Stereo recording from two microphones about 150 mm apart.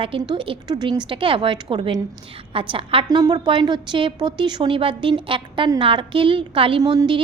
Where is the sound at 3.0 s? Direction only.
25° right (ahead or behind).